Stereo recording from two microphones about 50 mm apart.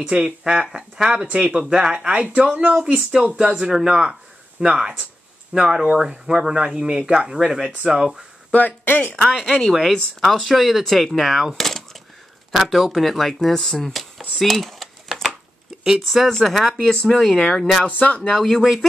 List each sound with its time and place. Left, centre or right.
0.0 s speech: centre
0.4 s speech: centre
2.1 s speech: right
2.9 s speech: centre
8.5 s speech: left
8.8 s speech: left
9.5 s speech: centre
10.2 s speech: centre
11.5 s a sound: centre
12.5 s speech: centre
17.9 s speech: left
18.4 s speech: centre